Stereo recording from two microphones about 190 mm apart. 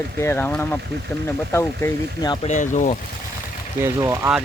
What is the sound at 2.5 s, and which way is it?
Speech, 40° left (ahead or behind).